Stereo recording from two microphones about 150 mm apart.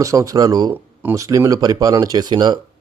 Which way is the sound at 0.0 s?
20° right (ahead or behind).